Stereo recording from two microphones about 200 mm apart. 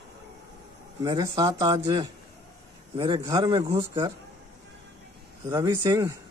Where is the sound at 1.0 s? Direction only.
20° right (ahead or behind).